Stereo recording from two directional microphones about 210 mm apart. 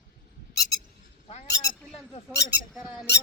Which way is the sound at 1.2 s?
30° left (ahead or behind).